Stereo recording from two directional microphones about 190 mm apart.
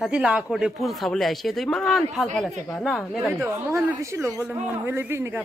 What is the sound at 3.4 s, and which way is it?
A man's voice, 15° right (ahead or behind).